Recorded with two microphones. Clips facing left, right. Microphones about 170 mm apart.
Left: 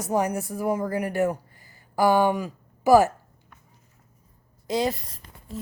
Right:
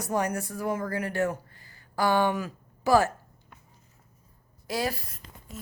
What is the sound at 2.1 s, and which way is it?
Speech, 15° left (ahead or behind).